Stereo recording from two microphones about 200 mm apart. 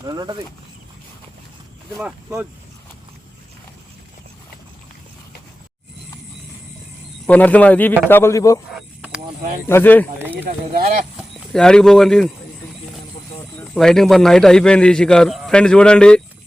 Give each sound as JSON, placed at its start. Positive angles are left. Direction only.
{"t": 0.0, "sound": "speech", "side_deg": -20}
{"t": 2.0, "sound": "speech", "side_deg": -5}
{"t": 7.3, "sound": "a man's voice", "side_deg": 5}
{"t": 9.6, "sound": "a man's voice", "side_deg": 10}
{"t": 10.2, "sound": "a sound", "side_deg": -10}
{"t": 11.2, "sound": "speech", "side_deg": 5}
{"t": 13.6, "sound": "a man's voice", "side_deg": 0}